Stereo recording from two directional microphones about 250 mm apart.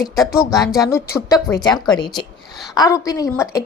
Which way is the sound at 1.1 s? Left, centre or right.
Centre.